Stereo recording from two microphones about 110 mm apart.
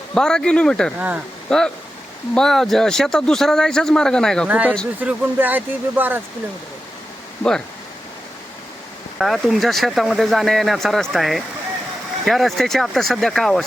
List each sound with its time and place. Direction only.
0.1 s speech: 5° left (ahead or behind)
0.9 s speech: 10° right (ahead or behind)
1.5 s speech: 5° left (ahead or behind)
4.4 s speech: 15° right (ahead or behind)
9.1 s speech: centre (ahead or behind)